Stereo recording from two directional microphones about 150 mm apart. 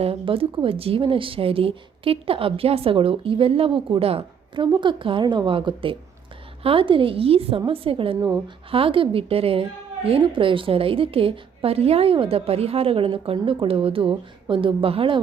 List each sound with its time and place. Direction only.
0.0 s a woman's voice: 40° right (ahead or behind)